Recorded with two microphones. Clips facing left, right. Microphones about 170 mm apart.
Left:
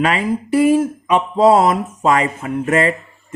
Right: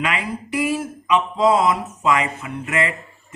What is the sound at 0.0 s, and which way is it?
Speech, 40° left (ahead or behind).